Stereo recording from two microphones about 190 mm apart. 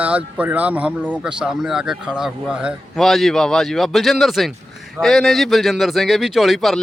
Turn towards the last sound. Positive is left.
turn(degrees=0)  # may be behind; listen again after turning